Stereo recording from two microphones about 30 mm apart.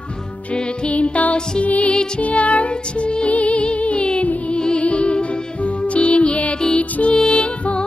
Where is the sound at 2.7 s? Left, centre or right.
Left.